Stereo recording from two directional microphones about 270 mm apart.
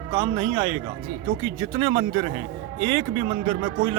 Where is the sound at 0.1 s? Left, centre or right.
Centre.